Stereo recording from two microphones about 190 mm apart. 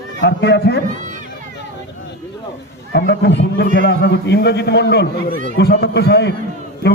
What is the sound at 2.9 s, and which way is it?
A man's voice, 60° left (ahead or behind).